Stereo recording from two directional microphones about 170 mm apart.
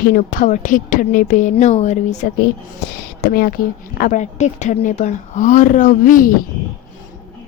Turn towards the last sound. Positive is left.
turn(degrees=50)  # may be behind; listen again after turning